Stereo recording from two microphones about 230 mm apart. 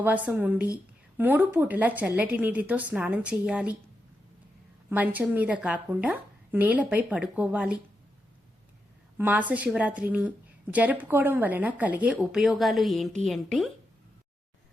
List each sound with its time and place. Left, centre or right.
0.0 s a woman's voice: centre
4.9 s a woman's voice: centre
9.1 s a woman's voice: centre